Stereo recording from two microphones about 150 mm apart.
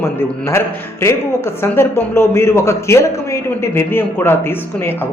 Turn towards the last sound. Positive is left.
turn(degrees=15)  # may be behind; listen again after turning